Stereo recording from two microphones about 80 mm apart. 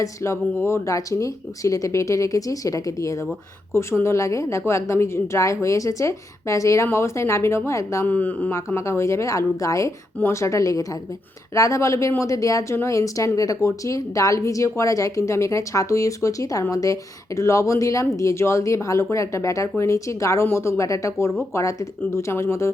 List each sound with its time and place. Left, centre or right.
0.0 s a woman's voice: left
8.0 s speech: left
8.5 s a woman's voice: left